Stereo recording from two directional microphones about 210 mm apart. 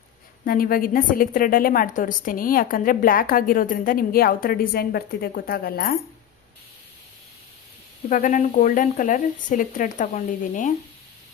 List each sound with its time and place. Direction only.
0.4 s a woman's voice: 45° left (ahead or behind)
8.1 s speech: 40° left (ahead or behind)